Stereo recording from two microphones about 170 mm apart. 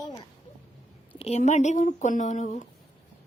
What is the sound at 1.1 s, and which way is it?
Speech, 40° left (ahead or behind).